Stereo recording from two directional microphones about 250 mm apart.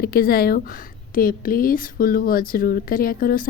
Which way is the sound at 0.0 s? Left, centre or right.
Left.